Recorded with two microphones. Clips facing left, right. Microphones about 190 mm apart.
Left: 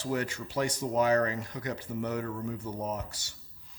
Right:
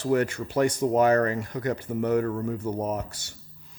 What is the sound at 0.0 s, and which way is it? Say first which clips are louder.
Speech: right 8 dB; 55° right (ahead or behind).